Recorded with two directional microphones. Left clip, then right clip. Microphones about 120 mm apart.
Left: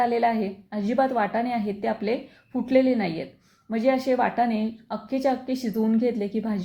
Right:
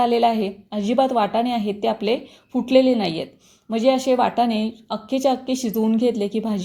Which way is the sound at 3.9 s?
40° right (ahead or behind).